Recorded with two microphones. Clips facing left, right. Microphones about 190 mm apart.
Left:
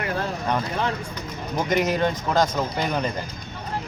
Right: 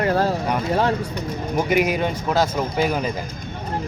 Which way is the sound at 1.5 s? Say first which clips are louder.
Right 2 dB; 10° right (ahead or behind).